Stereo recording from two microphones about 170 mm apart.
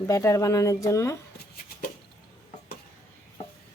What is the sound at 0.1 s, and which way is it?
Speech, 20° left (ahead or behind).